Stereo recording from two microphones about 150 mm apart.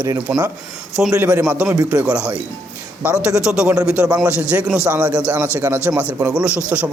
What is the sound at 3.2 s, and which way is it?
A man's voice, 5° right (ahead or behind).